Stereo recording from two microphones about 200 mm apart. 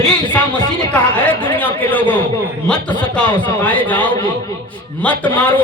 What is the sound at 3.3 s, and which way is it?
Speech, 25° left (ahead or behind).